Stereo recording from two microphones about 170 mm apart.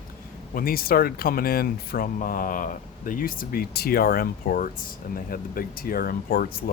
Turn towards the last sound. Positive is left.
turn(degrees=60)  # may be behind; listen again after turning